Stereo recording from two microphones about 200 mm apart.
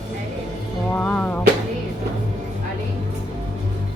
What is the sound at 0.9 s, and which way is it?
Speech, 5° left (ahead or behind).